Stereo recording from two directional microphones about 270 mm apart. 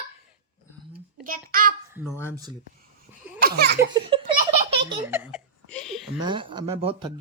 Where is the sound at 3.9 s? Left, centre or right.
Centre.